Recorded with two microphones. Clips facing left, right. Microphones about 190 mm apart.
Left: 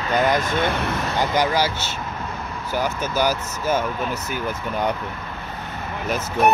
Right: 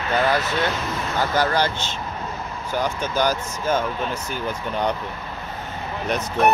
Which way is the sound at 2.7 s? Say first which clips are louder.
Even; 10° left (ahead or behind).